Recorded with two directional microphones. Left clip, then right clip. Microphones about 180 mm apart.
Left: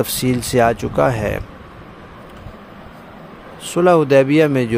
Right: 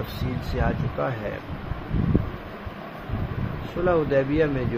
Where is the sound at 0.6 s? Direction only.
75° left (ahead or behind).